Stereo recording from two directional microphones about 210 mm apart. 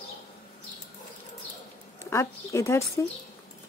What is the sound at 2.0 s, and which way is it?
Speech, 15° left (ahead or behind).